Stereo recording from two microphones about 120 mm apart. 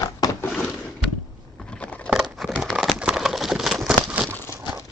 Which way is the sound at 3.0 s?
5° right (ahead or behind).